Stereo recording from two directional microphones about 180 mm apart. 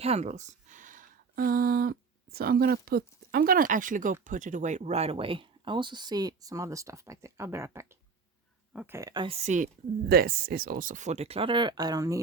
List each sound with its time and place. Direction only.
0.0 s speech: 35° right (ahead or behind); by 9.0 s 5° right (ahead or behind)
9.0 s speech: 20° right (ahead or behind); by 9.6 s 40° right (ahead or behind)
10.1 s speech: 55° right (ahead or behind); by 12.2 s 20° right (ahead or behind)